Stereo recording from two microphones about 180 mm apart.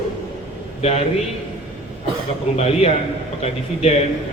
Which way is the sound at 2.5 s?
35° left (ahead or behind).